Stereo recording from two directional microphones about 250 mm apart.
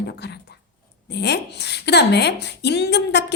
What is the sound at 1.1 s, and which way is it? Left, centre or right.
A woman's voice, left.